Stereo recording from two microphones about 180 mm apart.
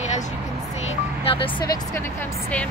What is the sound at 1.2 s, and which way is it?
Speech, 30° left (ahead or behind).